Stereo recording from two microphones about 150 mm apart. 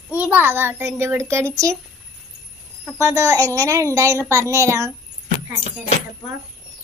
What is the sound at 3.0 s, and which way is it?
A child's voice, 20° right (ahead or behind).